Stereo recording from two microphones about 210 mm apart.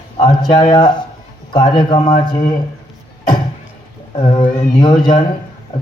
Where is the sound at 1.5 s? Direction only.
20° left (ahead or behind).